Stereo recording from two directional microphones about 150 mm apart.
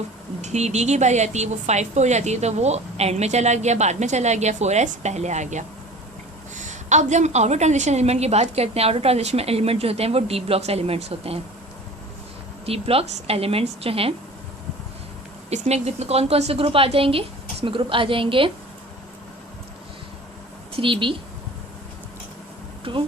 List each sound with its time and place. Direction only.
0.4 s a woman's voice: 50° right (ahead or behind)
12.6 s a woman's voice: 40° right (ahead or behind)
15.4 s a woman's voice: 45° right (ahead or behind)
20.7 s a woman's voice: 35° right (ahead or behind)
22.8 s speech: 35° right (ahead or behind)